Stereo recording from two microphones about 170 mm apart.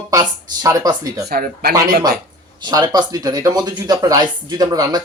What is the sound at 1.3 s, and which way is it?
Speech, 60° right (ahead or behind).